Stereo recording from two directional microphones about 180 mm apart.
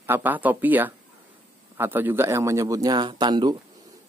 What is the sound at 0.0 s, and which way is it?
A man's voice, 10° right (ahead or behind).